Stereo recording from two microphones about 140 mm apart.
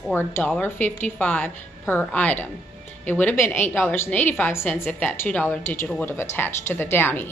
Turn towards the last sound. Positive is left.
turn(degrees=15)  # may be behind; listen again after turning